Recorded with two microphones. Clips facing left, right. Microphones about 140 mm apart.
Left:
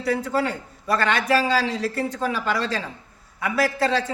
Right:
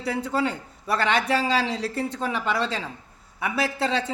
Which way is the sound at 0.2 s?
30° right (ahead or behind).